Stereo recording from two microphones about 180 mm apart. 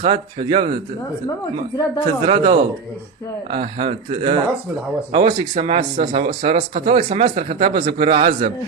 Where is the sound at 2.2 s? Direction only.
30° right (ahead or behind).